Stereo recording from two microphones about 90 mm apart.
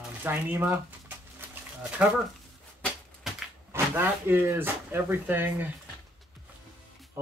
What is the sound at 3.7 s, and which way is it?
Speech, 25° right (ahead or behind).